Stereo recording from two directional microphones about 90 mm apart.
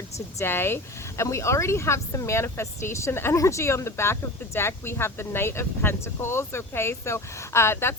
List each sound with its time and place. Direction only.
0.3 s speech: 25° left (ahead or behind)